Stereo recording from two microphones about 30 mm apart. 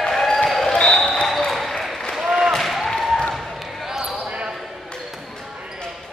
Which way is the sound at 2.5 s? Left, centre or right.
Centre.